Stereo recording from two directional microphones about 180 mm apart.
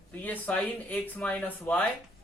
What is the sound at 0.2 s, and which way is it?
A man's voice, 10° left (ahead or behind).